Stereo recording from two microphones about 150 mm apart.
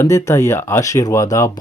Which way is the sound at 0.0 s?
20° left (ahead or behind).